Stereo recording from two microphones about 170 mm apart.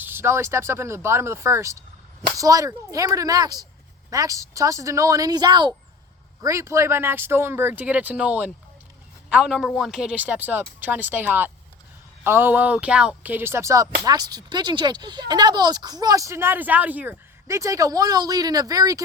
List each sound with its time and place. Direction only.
0.0 s speech: 15° right (ahead or behind)